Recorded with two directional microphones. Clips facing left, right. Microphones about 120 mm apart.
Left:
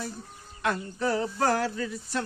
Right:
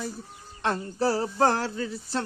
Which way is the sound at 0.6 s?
30° right (ahead or behind).